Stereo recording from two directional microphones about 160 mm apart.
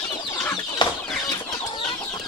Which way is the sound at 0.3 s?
15° left (ahead or behind).